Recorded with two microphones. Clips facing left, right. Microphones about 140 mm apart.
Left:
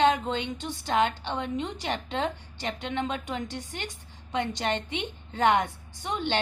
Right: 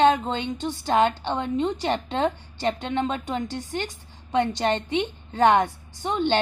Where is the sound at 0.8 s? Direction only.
35° right (ahead or behind).